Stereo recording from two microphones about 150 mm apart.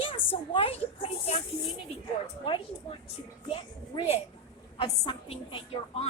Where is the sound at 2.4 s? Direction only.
35° left (ahead or behind).